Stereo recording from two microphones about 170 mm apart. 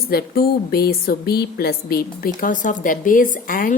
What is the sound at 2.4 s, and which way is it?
Speech, 50° left (ahead or behind).